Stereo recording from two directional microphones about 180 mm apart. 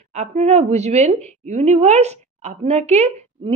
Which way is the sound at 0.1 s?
40° right (ahead or behind).